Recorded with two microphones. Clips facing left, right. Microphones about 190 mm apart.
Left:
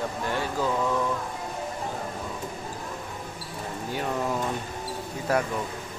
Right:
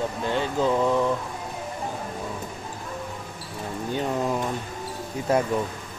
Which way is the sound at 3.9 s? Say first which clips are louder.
Right 3 dB; 20° right (ahead or behind).